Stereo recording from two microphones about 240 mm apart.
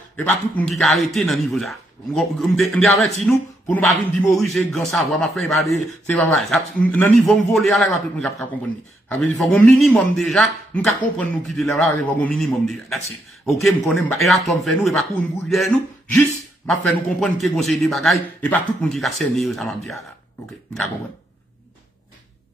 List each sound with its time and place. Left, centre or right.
0.1 s a man's voice: centre